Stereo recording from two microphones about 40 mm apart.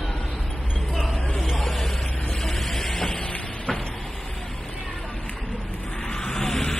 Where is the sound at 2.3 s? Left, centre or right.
Centre.